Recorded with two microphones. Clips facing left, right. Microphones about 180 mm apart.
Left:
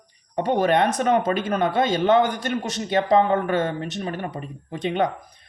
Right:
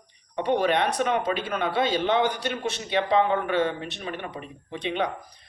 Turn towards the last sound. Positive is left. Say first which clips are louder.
# left 5 dB
turn(degrees=45)  # may be behind; listen again after turning